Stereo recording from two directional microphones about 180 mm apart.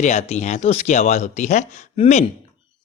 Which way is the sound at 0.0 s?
40° left (ahead or behind).